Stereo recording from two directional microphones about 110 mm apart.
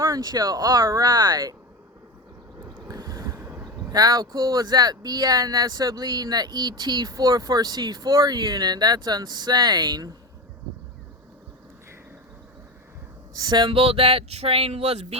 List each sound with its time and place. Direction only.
0.0 s speech: 30° right (ahead or behind)
2.6 s vehicle: 20° right (ahead or behind)
3.8 s speech: 35° right (ahead or behind)
13.3 s speech: 40° right (ahead or behind)
13.7 s a sound: 60° right (ahead or behind); by 15.0 s 75° right (ahead or behind)